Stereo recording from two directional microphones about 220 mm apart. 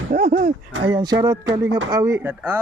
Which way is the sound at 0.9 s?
20° right (ahead or behind).